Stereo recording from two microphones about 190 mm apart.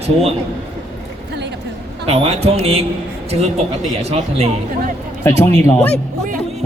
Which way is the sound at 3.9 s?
35° right (ahead or behind).